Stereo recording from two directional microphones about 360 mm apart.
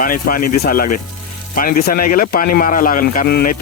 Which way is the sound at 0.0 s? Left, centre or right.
Left.